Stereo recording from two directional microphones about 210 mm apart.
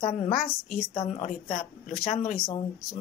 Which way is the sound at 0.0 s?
30° left (ahead or behind).